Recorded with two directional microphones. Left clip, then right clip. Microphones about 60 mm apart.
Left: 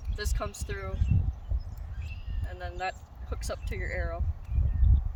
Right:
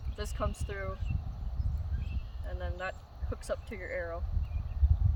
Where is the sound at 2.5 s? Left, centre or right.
Right.